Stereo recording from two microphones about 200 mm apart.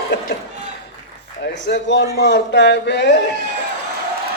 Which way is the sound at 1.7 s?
60° left (ahead or behind).